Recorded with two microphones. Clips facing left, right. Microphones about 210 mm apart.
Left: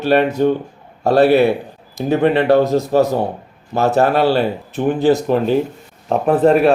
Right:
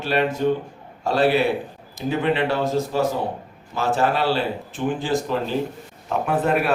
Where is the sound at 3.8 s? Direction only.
65° left (ahead or behind).